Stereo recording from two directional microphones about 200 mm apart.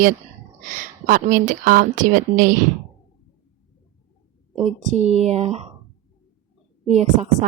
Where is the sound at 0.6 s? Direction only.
45° right (ahead or behind).